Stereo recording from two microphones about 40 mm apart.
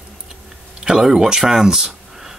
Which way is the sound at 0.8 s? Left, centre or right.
Centre.